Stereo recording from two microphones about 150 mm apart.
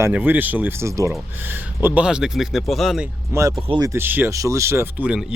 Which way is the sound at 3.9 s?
15° right (ahead or behind).